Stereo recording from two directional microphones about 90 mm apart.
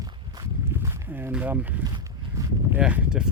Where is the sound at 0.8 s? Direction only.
25° right (ahead or behind).